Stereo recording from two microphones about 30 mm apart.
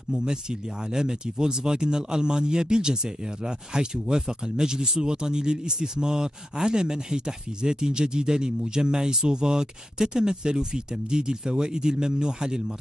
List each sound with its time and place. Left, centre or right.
0.1 s speech: right